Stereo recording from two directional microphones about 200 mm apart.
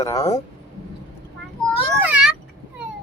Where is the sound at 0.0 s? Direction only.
15° left (ahead or behind).